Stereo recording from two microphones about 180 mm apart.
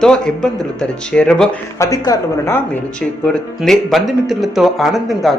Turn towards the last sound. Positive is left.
turn(degrees=0)  # may be behind; listen again after turning